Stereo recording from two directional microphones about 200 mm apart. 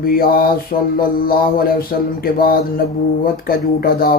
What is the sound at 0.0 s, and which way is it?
Speech, 50° left (ahead or behind).